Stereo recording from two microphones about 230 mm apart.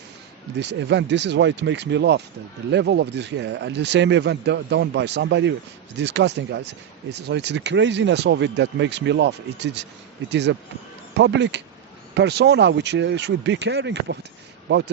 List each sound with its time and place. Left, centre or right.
0.6 s speech: right